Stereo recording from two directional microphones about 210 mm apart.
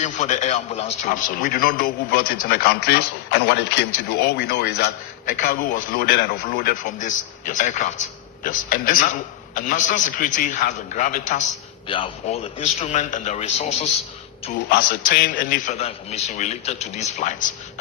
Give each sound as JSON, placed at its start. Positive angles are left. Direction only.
{"t": 0.0, "sound": "a man's voice", "side_deg": 35}
{"t": 11.9, "sound": "a man's voice", "side_deg": 25}
{"t": 14.7, "sound": "a man's voice", "side_deg": 40}